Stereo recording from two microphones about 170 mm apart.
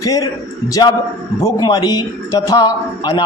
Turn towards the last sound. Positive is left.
turn(degrees=20)  # may be behind; listen again after turning